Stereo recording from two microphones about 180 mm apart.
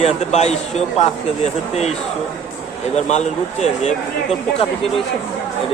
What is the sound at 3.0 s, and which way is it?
Speech, 40° left (ahead or behind).